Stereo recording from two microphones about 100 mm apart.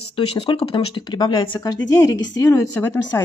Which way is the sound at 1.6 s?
40° left (ahead or behind).